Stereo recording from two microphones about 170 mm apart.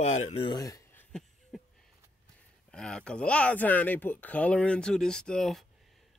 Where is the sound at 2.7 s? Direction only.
5° left (ahead or behind).